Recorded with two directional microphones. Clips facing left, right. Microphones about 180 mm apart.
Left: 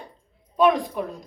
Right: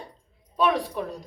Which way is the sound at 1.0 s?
10° left (ahead or behind).